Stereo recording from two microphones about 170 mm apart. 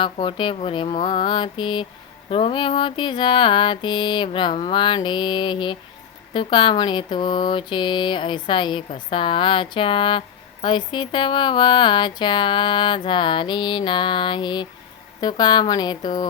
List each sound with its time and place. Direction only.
0.0 s mantra: 30° left (ahead or behind)